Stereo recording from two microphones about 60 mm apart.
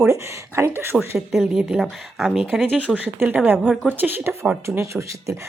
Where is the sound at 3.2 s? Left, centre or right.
Right.